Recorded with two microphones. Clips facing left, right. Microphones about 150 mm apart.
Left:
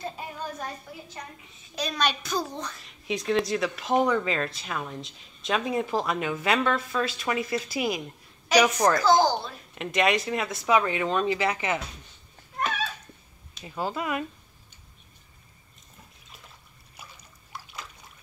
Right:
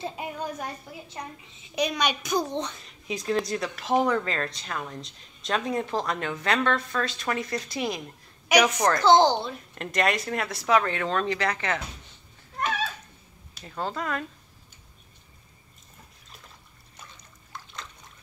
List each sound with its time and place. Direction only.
0.0 s speech: 15° right (ahead or behind)
1.8 s a child's voice: 15° right (ahead or behind)
3.1 s speech: centre (ahead or behind)
9.0 s a child's voice: 25° right (ahead or behind)
9.8 s speech: centre (ahead or behind)
13.7 s speech: 10° left (ahead or behind)
16.9 s trickle: 10° left (ahead or behind)